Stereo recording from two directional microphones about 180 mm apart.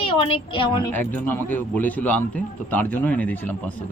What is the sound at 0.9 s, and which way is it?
A man's voice, 10° left (ahead or behind).